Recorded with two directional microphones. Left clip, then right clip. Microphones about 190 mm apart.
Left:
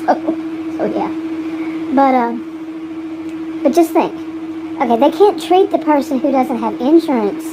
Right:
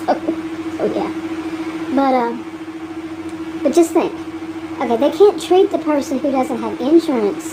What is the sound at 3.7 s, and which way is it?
A woman's voice, 25° left (ahead or behind).